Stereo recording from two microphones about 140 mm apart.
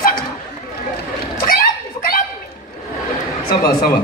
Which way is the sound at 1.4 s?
90° left.